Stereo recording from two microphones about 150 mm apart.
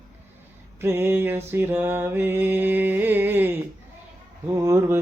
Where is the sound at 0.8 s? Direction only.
15° right (ahead or behind).